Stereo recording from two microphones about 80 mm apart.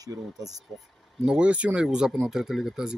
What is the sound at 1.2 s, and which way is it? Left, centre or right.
Speech, centre.